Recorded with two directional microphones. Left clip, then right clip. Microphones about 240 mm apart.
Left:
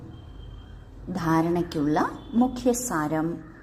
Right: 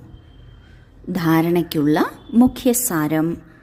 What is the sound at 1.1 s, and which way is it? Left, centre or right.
A woman's voice, right.